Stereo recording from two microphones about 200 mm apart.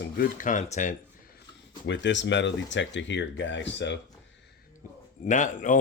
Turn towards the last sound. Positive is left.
turn(degrees=40)  # may be behind; listen again after turning